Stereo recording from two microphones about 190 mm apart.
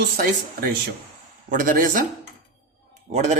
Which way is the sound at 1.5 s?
45° right (ahead or behind).